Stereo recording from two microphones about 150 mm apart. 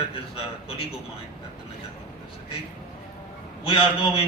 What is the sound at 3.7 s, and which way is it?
Speech, 40° left (ahead or behind).